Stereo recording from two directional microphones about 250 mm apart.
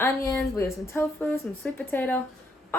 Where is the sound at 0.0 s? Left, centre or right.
Centre.